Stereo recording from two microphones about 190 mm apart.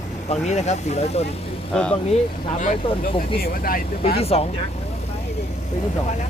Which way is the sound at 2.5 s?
40° left (ahead or behind).